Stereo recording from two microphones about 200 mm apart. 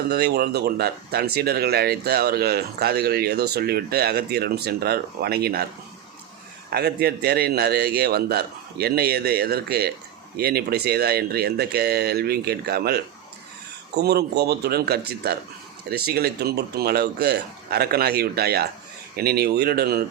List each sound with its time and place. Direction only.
0.1 s speech: 55° right (ahead or behind)
6.7 s speech: 55° right (ahead or behind)